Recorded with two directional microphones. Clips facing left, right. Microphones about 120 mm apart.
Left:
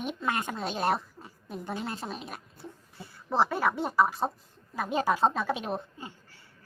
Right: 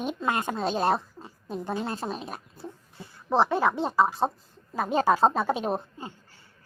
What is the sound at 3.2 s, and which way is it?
A woman's voice, 20° right (ahead or behind).